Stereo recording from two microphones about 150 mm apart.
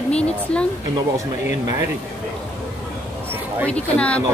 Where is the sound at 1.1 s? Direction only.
20° right (ahead or behind).